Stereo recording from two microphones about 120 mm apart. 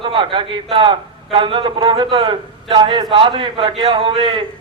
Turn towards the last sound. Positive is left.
turn(degrees=-45)  # may be behind; listen again after turning